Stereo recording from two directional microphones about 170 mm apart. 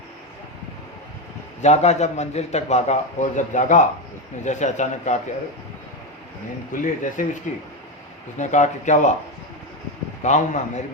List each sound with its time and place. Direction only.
1.6 s a man's voice: 40° left (ahead or behind)
6.7 s speech: 50° left (ahead or behind)
10.2 s speech: 45° left (ahead or behind)